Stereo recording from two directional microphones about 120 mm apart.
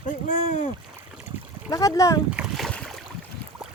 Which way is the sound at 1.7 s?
25° left (ahead or behind).